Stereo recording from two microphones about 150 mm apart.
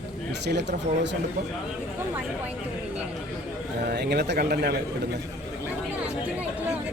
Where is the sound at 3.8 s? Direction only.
90° right.